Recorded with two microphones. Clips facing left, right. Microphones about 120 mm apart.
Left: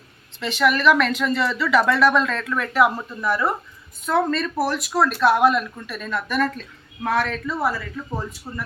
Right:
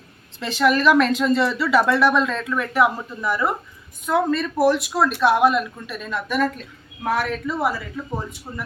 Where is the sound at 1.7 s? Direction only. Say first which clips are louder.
Left 1 dB; 25° right (ahead or behind).